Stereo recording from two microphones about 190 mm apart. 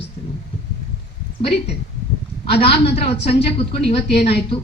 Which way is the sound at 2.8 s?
30° left (ahead or behind).